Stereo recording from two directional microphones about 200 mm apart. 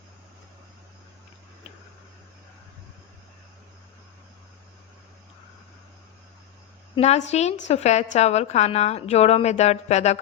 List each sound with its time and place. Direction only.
6.9 s a woman's voice: 30° left (ahead or behind)